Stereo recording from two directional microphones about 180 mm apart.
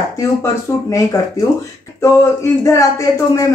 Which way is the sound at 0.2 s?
20° left (ahead or behind).